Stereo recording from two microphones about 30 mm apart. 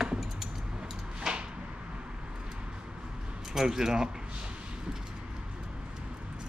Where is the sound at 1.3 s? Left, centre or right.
Centre.